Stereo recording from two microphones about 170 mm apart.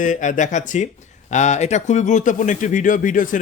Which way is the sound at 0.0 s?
50° left (ahead or behind).